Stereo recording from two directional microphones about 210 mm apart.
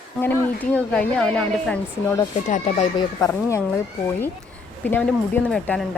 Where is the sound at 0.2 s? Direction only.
5° left (ahead or behind).